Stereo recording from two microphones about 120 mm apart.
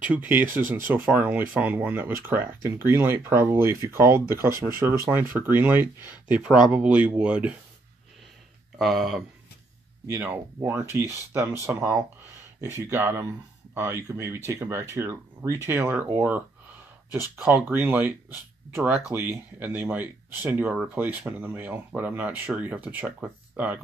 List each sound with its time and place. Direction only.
0.0 s speech: 10° right (ahead or behind)
8.7 s speech: centre (ahead or behind)
10.0 s speech: 20° right (ahead or behind)